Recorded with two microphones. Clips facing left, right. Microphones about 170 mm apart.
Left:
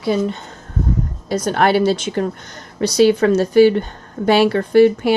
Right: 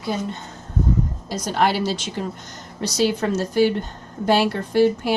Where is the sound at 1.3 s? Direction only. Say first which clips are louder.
Left 6 dB; 60° left (ahead or behind).